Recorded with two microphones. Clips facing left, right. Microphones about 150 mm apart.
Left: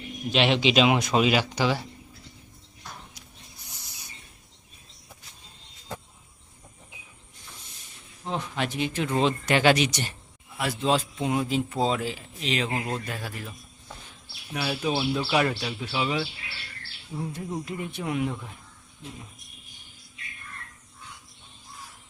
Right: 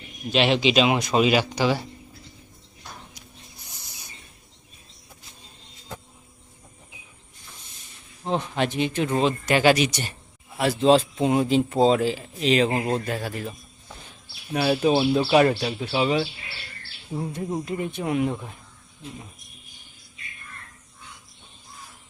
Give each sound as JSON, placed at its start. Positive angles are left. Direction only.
{"t": 0.3, "sound": "speech", "side_deg": -5}
{"t": 1.4, "sound": "speech", "side_deg": -10}
{"t": 8.2, "sound": "speech", "side_deg": -25}
{"t": 10.6, "sound": "a man's voice", "side_deg": -30}
{"t": 14.5, "sound": "speech", "side_deg": -40}
{"t": 14.8, "sound": "a man's voice", "side_deg": -30}
{"t": 15.4, "sound": "a man's voice", "side_deg": -40}